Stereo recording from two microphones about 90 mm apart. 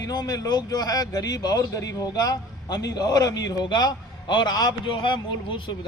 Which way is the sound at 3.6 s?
55° left (ahead or behind).